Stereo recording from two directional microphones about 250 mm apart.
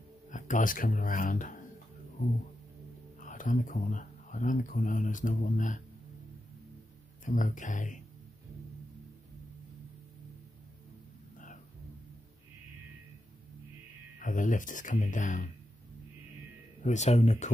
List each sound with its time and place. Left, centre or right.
0.3 s speech: left
3.2 s speech: left
7.2 s speech: left
11.3 s a sound: left
14.2 s speech: left
16.8 s speech: left